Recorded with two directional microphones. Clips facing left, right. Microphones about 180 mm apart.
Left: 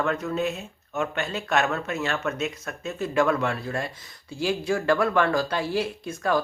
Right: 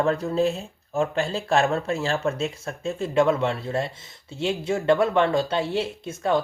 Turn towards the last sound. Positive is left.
turn(degrees=-25)  # may be behind; listen again after turning